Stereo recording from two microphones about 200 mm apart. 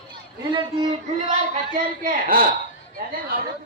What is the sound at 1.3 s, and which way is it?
Speech, 40° right (ahead or behind).